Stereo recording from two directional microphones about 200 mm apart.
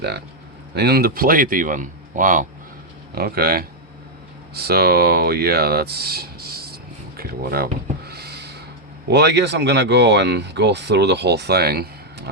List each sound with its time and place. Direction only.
0.8 s speech: 50° right (ahead or behind)
7.2 s a sound: 50° right (ahead or behind)
9.0 s speech: 55° right (ahead or behind)